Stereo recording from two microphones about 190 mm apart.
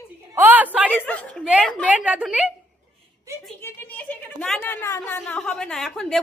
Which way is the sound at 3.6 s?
10° left (ahead or behind).